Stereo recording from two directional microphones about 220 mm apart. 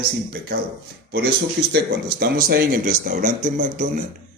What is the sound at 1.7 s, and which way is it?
Speech, 45° right (ahead or behind).